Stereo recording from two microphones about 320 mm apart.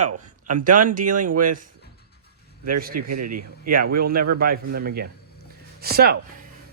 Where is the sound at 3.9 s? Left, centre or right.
Right.